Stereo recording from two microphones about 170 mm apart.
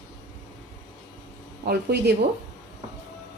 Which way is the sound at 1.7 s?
75° right (ahead or behind).